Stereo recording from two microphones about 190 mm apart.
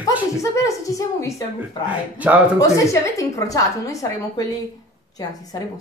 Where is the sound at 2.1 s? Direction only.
10° right (ahead or behind).